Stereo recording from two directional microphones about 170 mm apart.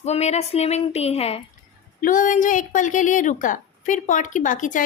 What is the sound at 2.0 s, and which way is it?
Speech, 50° left (ahead or behind).